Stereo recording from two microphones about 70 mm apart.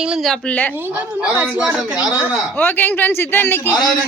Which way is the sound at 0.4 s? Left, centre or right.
Left.